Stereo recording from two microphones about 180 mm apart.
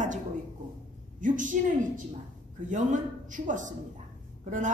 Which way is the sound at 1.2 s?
45° right (ahead or behind).